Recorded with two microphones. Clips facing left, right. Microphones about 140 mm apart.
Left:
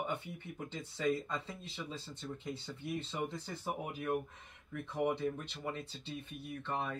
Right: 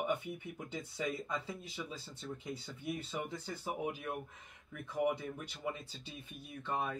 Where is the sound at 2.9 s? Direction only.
Centre (ahead or behind).